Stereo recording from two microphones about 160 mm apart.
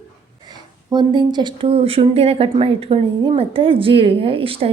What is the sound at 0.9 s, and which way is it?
A woman's voice, 25° right (ahead or behind).